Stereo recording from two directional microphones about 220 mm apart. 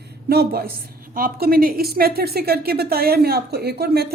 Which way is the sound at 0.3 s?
45° right (ahead or behind).